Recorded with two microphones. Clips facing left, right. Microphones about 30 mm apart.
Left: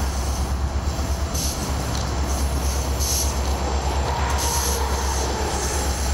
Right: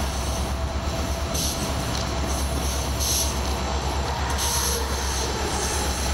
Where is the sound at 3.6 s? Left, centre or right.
Right.